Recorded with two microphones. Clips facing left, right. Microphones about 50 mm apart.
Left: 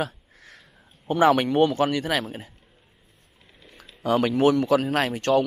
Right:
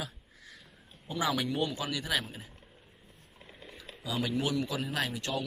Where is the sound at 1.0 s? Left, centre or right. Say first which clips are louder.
Left 12 dB; left.